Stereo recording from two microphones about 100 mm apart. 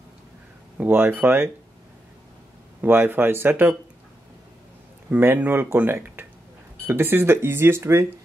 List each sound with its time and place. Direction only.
0.7 s speech: 20° right (ahead or behind)
2.8 s speech: 20° right (ahead or behind)
5.1 s speech: 20° right (ahead or behind)